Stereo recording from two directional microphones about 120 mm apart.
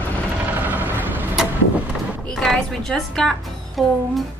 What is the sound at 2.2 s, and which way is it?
A woman's voice, 5° left (ahead or behind).